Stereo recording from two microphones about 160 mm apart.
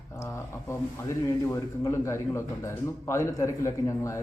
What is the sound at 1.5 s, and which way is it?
A man's voice, 20° left (ahead or behind).